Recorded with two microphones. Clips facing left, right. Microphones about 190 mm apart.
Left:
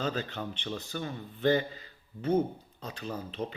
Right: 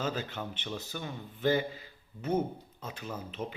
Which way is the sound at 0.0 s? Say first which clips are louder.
Left 1 dB; 10° right (ahead or behind).